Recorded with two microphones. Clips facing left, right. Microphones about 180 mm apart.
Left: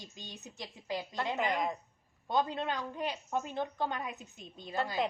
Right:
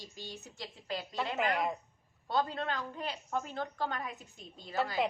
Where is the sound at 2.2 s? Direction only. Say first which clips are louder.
Left 1 dB; 15° left (ahead or behind).